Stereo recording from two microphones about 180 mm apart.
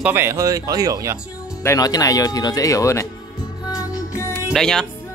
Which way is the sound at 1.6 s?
20° left (ahead or behind).